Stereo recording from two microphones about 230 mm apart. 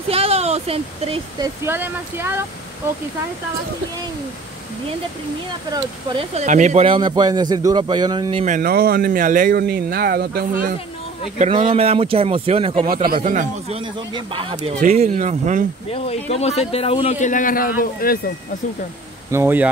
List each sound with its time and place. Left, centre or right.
0.1 s speech: right
1.6 s speech: centre
5.7 s speech: right
11.3 s speech: right
12.8 s speech: right
15.9 s a man's voice: left
19.3 s speech: centre